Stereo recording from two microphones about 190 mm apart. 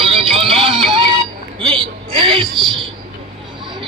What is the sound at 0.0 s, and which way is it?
Music, 30° right (ahead or behind).